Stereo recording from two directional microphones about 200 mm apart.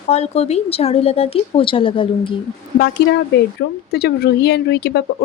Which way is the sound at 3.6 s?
55° left (ahead or behind).